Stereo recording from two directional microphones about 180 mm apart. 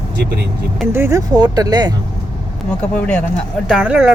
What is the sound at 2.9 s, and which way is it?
Speech, 5° left (ahead or behind).